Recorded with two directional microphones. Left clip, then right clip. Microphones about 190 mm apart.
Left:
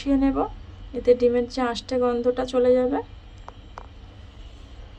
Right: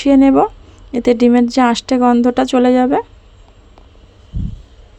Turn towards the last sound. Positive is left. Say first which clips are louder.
# right 7 dB
turn(degrees=-45)  # may be behind; listen again after turning